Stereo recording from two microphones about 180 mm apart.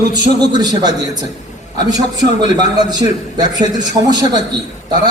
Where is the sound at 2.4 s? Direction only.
25° right (ahead or behind).